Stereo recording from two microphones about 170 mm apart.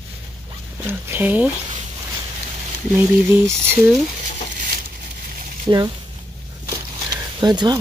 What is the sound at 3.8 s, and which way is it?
Speech, centre (ahead or behind).